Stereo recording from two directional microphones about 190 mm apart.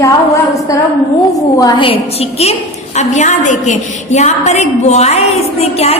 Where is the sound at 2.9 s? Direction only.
40° left (ahead or behind).